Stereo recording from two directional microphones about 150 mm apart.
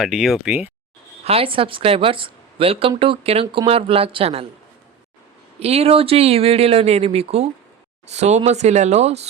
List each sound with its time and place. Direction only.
0.0 s speech: centre (ahead or behind)
1.2 s a woman's voice: 40° right (ahead or behind)
5.5 s speech: 45° right (ahead or behind)